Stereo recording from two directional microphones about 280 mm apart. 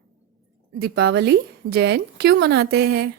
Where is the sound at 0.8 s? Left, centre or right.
Right.